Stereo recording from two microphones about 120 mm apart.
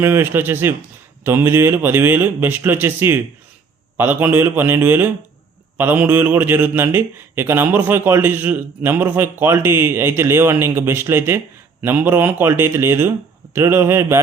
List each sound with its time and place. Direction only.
0.0 s speech: 20° right (ahead or behind)